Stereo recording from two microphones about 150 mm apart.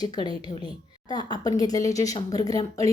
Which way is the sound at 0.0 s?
30° left (ahead or behind).